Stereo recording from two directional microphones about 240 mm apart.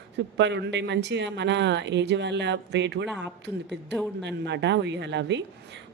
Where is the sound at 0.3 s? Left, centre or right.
Right.